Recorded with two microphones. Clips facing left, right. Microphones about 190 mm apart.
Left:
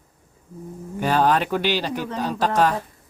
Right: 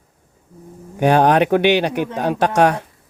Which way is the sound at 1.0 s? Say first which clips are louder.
Right 6 dB; 65° right (ahead or behind).